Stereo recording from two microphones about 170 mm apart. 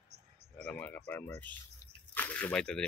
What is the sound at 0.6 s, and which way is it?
Speech, 10° left (ahead or behind).